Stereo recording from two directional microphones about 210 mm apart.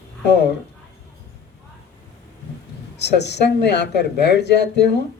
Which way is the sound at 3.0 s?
55° left (ahead or behind).